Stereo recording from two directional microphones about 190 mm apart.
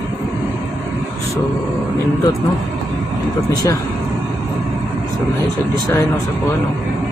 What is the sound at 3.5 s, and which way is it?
Speech, 20° left (ahead or behind).